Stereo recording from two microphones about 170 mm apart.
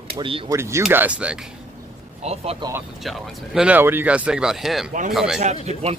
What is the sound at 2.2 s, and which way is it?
Speech, 40° right (ahead or behind).